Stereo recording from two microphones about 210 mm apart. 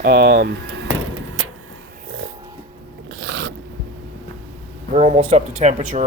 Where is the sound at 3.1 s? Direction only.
60° right (ahead or behind).